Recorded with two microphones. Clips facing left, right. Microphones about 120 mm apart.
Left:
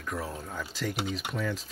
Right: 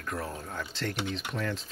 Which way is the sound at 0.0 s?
5° left (ahead or behind).